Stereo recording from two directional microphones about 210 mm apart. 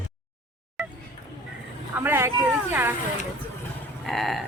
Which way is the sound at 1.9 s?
10° right (ahead or behind).